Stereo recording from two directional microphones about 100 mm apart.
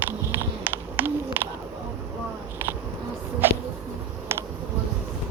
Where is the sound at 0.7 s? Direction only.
20° right (ahead or behind).